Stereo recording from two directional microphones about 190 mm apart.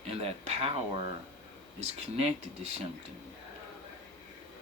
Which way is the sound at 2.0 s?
35° right (ahead or behind).